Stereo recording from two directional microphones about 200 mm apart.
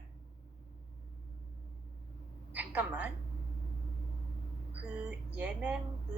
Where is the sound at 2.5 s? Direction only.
5° right (ahead or behind).